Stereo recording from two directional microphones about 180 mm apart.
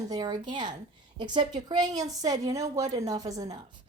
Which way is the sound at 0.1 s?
20° right (ahead or behind).